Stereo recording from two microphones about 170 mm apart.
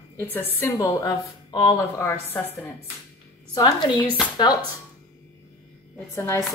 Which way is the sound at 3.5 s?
25° left (ahead or behind).